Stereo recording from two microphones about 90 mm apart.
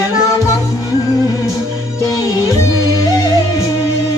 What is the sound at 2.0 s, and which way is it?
Music, 35° left (ahead or behind).